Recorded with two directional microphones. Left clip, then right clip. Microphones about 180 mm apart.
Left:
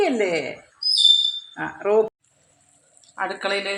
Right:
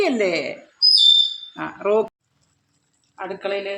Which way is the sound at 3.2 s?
10° left (ahead or behind).